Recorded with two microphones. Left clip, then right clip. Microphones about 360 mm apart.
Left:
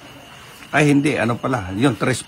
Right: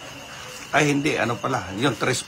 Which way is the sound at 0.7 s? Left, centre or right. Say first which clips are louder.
Left 4 dB; centre.